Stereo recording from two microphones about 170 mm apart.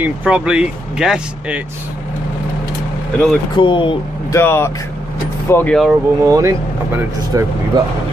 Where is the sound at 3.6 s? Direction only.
30° left (ahead or behind).